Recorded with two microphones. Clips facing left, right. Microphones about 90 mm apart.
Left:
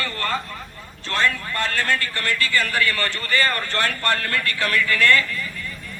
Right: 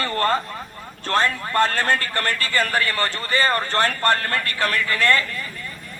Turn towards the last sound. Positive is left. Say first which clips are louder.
# left 1 dB
turn(degrees=-35)  # may be behind; listen again after turning